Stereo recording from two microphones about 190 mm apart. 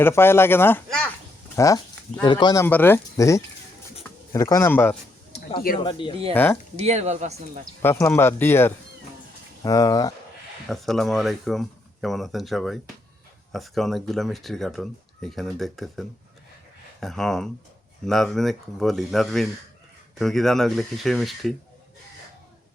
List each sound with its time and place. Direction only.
0.0 s speech: 10° left (ahead or behind)
1.5 s speech: 15° left (ahead or behind)
2.6 s speech: 10° left (ahead or behind)
5.3 s a sound: 30° left (ahead or behind)
5.8 s speech: 25° left (ahead or behind)
6.3 s speech: 10° left (ahead or behind)
6.7 s speech: 35° right (ahead or behind)
7.8 s speech: 10° left (ahead or behind)
10.7 s speech: centre (ahead or behind)